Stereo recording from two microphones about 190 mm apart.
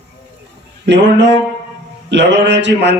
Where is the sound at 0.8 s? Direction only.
65° right (ahead or behind).